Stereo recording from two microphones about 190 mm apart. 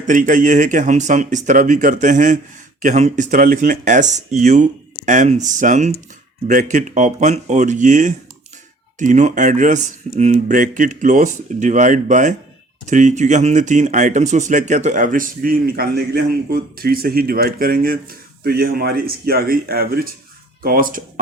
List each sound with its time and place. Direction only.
0.0 s speech: 45° right (ahead or behind)